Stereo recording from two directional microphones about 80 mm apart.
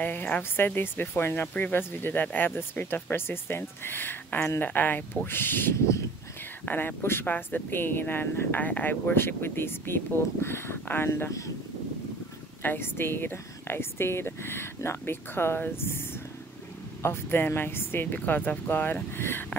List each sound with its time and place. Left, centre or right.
0.0 s speech: left
5.8 s speech: left
6.6 s speech: left
12.6 s speech: left
17.0 s speech: left